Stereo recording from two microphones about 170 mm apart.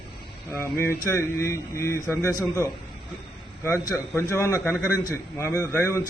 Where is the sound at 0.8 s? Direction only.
15° left (ahead or behind).